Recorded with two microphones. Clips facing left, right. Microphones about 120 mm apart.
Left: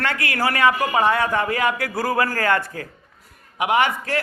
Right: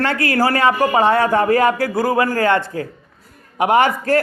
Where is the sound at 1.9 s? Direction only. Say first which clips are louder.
Right 5 dB; 25° right (ahead or behind).